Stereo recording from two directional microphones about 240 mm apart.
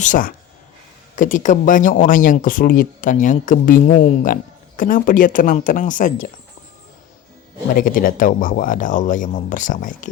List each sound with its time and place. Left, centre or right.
0.0 s speech: left
7.7 s speech: left